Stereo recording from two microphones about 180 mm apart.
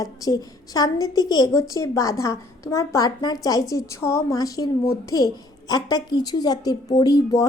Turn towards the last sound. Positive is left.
turn(degrees=20)  # may be behind; listen again after turning